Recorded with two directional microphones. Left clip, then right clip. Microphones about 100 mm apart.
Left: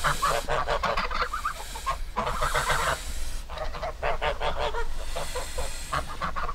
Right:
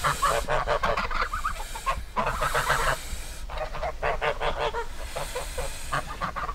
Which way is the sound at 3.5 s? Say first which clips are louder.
Right 2 dB; 85° right.